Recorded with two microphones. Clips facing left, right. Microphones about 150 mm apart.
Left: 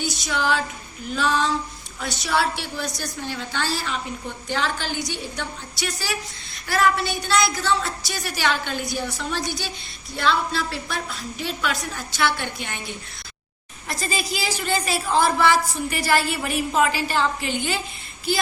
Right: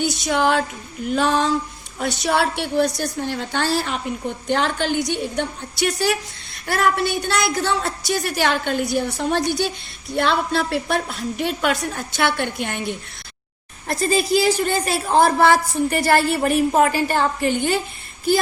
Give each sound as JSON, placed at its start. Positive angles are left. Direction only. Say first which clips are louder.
{"t": 0.0, "sound": "a woman's voice", "louder": "right 6 dB", "side_deg": -55}
{"t": 14.1, "sound": "a woman's voice", "louder": "right 11 dB", "side_deg": -55}